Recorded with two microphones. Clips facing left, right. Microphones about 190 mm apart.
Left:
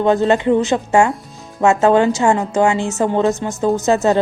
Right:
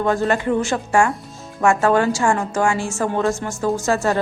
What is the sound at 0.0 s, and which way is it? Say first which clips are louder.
A woman's voice: left 5 dB; 20° left (ahead or behind).